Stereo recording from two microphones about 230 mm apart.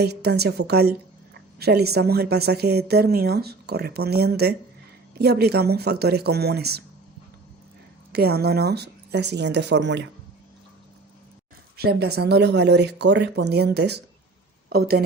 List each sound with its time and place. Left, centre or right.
0.0 s speech: right
8.1 s speech: right
11.8 s speech: right